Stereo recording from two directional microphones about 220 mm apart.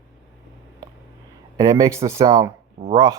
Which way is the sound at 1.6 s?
20° right (ahead or behind).